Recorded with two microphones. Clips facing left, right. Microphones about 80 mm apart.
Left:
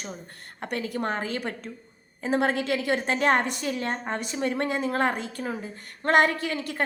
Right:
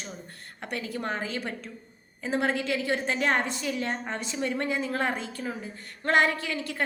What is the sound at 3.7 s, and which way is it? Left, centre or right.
Speech, left.